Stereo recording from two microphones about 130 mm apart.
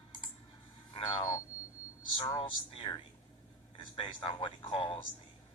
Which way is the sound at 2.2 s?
40° left (ahead or behind).